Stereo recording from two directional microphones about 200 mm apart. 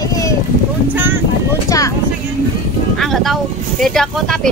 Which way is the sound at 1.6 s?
15° left (ahead or behind).